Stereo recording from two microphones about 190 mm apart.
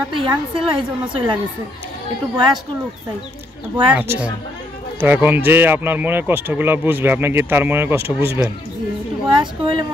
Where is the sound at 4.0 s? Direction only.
10° right (ahead or behind).